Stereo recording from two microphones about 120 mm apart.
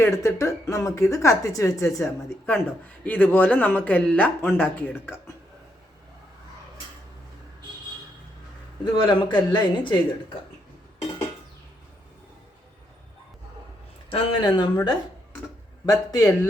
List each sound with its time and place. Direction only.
0.0 s a woman's voice: 25° left (ahead or behind)
2.5 s speech: 15° left (ahead or behind)
8.8 s speech: 40° left (ahead or behind)
14.1 s speech: 40° left (ahead or behind)
15.9 s a woman's voice: 30° left (ahead or behind)